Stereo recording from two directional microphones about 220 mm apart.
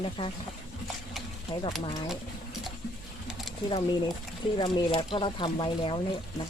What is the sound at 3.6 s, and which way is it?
Speech, 20° left (ahead or behind).